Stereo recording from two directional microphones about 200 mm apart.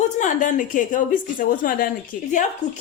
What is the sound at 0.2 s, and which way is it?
A woman's voice, 40° left (ahead or behind).